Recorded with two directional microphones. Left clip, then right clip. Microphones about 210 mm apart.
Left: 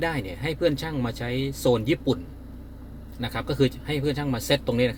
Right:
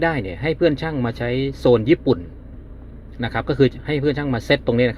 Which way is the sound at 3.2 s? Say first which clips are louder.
Right 7 dB; 25° right (ahead or behind).